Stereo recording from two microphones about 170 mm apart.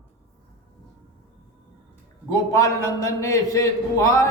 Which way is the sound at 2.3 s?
15° left (ahead or behind).